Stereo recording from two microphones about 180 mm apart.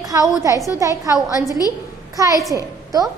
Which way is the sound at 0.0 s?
20° right (ahead or behind).